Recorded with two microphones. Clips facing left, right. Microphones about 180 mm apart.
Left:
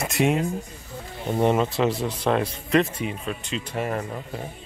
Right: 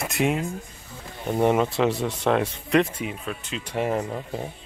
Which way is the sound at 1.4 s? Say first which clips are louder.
Even; 10° right (ahead or behind).